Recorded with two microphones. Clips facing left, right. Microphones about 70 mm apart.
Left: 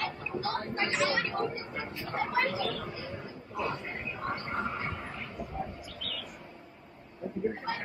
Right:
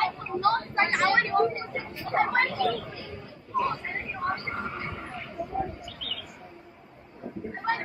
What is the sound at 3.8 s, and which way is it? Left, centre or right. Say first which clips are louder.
Speech: right 5 dB; right.